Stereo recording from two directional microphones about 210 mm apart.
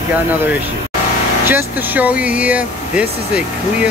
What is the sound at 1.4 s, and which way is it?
Speech, 10° right (ahead or behind).